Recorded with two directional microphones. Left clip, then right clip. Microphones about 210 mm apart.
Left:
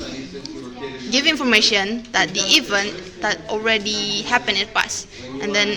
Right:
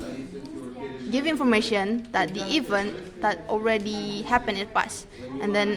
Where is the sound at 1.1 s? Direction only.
20° right (ahead or behind).